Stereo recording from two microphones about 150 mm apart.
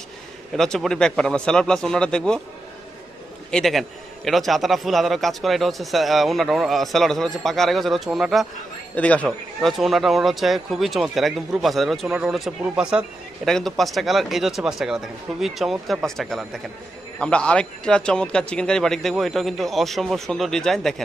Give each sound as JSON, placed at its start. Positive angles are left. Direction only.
{"t": 0.6, "sound": "a man's voice", "side_deg": 5}
{"t": 3.5, "sound": "a man's voice", "side_deg": 0}
{"t": 8.9, "sound": "a man's voice", "side_deg": 10}